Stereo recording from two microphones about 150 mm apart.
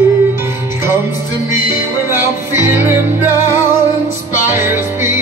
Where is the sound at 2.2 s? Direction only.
15° right (ahead or behind).